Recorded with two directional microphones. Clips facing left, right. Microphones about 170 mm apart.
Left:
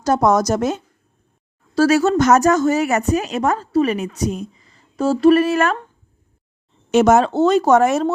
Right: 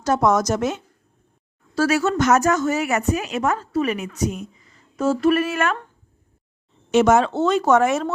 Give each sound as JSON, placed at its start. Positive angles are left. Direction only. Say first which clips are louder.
{"t": 0.0, "sound": "a woman's voice", "louder": "left 3 dB", "side_deg": 35}
{"t": 6.9, "sound": "a woman's voice", "louder": "left 3 dB", "side_deg": 40}